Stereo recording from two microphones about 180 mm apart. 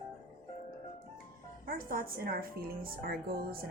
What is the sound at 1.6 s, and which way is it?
Speech, 55° right (ahead or behind).